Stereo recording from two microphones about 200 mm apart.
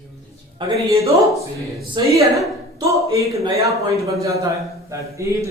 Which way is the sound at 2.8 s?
15° right (ahead or behind).